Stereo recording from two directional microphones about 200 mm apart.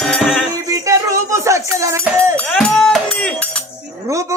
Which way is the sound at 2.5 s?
5° left (ahead or behind).